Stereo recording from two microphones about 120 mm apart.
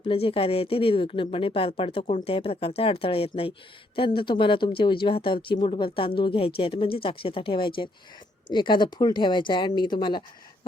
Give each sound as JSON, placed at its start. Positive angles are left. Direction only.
{"t": 0.1, "sound": "speech", "side_deg": 50}